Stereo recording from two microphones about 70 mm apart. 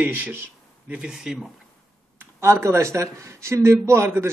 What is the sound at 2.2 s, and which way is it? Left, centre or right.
Speech, right.